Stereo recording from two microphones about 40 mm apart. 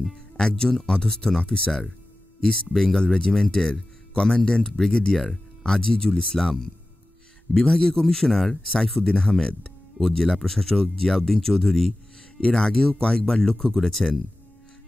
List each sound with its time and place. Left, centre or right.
0.1 s speech: centre
1.4 s speech: left
2.4 s speech: centre
4.1 s speech: centre